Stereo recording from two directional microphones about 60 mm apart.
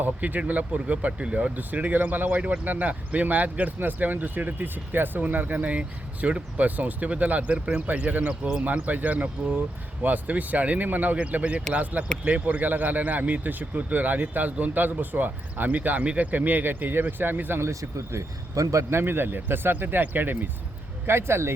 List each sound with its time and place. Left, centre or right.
0.0 s speech: right
1.5 s speech: right
8.3 s speech: centre
8.6 s speech: right
17.6 s speech: right
21.1 s speech: right